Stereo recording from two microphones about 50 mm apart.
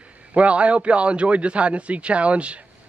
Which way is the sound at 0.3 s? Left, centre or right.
Right.